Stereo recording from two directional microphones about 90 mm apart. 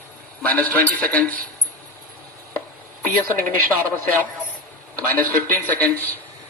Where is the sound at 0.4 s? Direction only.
15° left (ahead or behind).